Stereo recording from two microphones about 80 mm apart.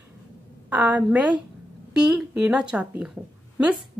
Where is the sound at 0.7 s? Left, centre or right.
Centre.